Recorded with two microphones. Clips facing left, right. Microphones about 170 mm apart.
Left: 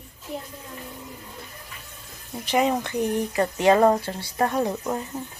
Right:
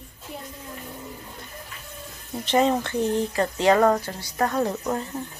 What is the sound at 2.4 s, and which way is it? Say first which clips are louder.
Speech: right 1 dB; 10° left (ahead or behind).